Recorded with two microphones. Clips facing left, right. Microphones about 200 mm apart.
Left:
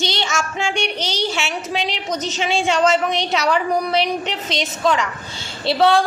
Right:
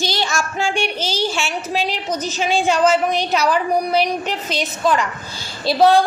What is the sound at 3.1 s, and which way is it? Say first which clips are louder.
Speech: right 2 dB; 90° left.